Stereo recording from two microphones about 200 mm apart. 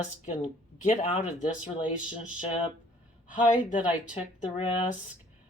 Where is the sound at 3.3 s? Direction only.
40° left (ahead or behind).